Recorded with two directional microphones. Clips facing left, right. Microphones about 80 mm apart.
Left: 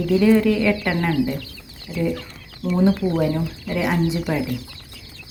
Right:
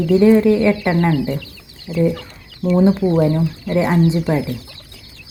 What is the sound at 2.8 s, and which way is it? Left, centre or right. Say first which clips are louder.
Speech: right 4 dB; centre.